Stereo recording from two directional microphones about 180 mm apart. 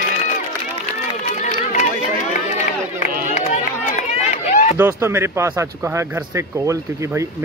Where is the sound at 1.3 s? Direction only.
40° left (ahead or behind).